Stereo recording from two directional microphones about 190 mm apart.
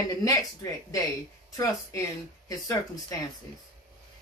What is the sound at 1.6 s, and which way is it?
Speech, 15° left (ahead or behind).